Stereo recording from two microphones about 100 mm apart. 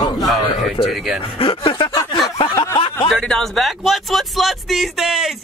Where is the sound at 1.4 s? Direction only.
60° left (ahead or behind).